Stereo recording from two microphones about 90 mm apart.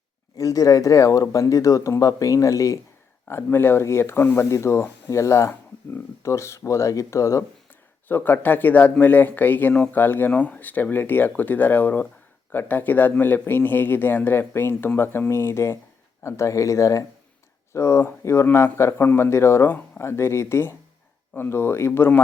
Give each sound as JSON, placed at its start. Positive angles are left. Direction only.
{"t": 0.3, "sound": "speech", "side_deg": 40}
{"t": 3.2, "sound": "speech", "side_deg": 25}
{"t": 8.0, "sound": "speech", "side_deg": 20}